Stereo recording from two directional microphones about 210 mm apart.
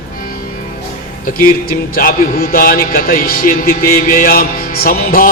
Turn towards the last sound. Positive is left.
turn(degrees=40)  # may be behind; listen again after turning